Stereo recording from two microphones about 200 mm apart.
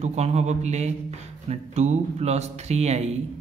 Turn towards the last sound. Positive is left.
turn(degrees=-35)  # may be behind; listen again after turning